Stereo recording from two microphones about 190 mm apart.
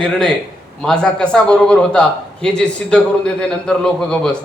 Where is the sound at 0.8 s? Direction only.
5° left (ahead or behind).